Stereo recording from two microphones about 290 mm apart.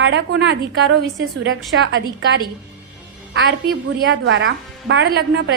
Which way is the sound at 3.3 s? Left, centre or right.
Right.